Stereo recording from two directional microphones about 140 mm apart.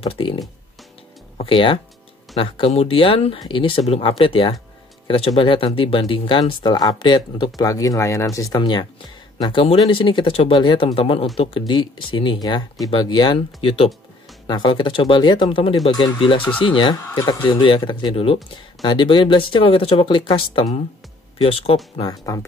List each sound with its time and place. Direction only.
0.0 s speech: 40° left (ahead or behind)
9.4 s speech: 40° left (ahead or behind)
15.9 s speech: 30° left (ahead or behind)
21.9 s speech: 30° left (ahead or behind)